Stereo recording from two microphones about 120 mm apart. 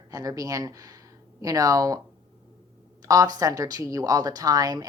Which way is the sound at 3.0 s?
30° right (ahead or behind).